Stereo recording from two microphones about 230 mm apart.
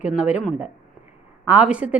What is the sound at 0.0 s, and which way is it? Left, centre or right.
A woman's voice, centre.